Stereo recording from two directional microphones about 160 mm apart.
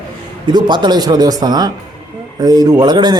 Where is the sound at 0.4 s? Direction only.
30° right (ahead or behind).